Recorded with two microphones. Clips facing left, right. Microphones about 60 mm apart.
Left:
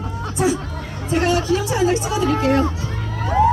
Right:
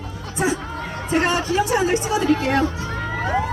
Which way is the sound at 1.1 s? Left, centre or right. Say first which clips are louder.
Left 1 dB; right.